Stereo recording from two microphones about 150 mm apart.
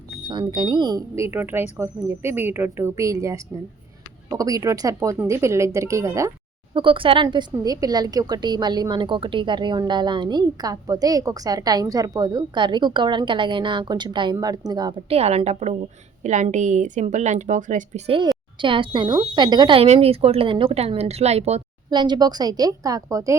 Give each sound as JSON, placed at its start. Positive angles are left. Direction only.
{"t": 0.3, "sound": "a woman's voice", "side_deg": -35}
{"t": 6.7, "sound": "a woman's voice", "side_deg": -35}
{"t": 15.1, "sound": "a woman's voice", "side_deg": -45}
{"t": 18.6, "sound": "speech", "side_deg": -35}
{"t": 21.8, "sound": "a woman's voice", "side_deg": -30}